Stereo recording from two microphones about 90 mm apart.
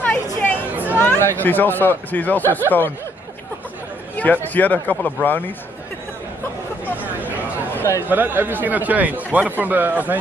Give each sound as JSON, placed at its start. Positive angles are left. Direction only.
{"t": 0.0, "sound": "chatter", "side_deg": 20}
{"t": 0.9, "sound": "speech", "side_deg": 20}
{"t": 4.2, "sound": "speech", "side_deg": 20}
{"t": 7.0, "sound": "a sound", "side_deg": -20}
{"t": 7.7, "sound": "a sound", "side_deg": 30}
{"t": 8.1, "sound": "speech", "side_deg": -20}